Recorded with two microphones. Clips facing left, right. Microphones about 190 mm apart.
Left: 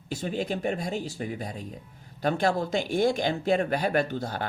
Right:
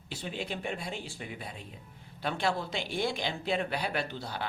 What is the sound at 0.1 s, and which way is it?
Speech, 45° left (ahead or behind).